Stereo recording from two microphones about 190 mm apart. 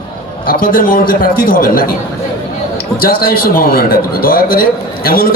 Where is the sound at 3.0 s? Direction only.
50° left (ahead or behind).